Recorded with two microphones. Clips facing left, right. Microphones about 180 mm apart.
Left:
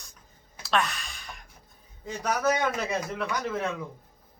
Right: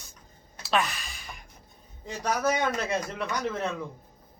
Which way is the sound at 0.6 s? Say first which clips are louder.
Even; centre (ahead or behind).